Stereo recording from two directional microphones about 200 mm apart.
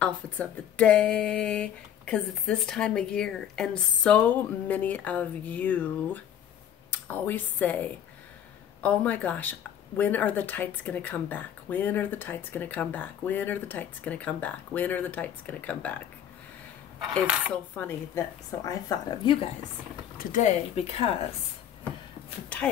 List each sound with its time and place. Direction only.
0.0 s speech: 5° left (ahead or behind)
17.1 s speech: 5° left (ahead or behind)
20.2 s speech: 40° left (ahead or behind)